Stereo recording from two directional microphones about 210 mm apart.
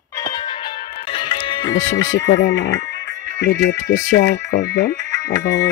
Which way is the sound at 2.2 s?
60° left (ahead or behind).